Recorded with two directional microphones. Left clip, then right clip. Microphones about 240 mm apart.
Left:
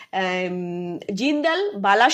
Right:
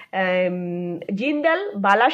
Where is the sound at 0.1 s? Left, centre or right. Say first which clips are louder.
Right 3 dB; left.